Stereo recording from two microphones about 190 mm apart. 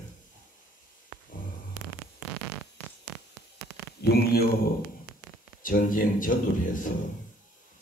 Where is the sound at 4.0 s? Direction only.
55° left (ahead or behind).